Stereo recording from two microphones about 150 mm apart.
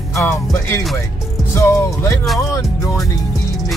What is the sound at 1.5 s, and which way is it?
Speech, 20° left (ahead or behind).